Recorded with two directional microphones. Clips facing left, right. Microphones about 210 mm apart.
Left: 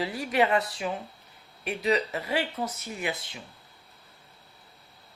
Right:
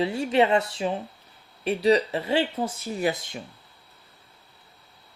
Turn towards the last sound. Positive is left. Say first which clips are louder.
# right 7 dB
turn(degrees=-40)  # may be behind; listen again after turning